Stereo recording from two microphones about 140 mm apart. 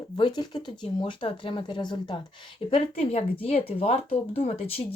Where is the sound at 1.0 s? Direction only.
40° left (ahead or behind).